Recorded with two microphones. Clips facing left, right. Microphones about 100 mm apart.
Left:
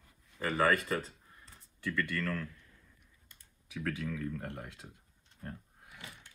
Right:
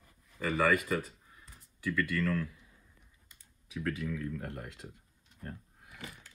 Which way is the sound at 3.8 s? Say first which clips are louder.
Right 1 dB; 5° right (ahead or behind).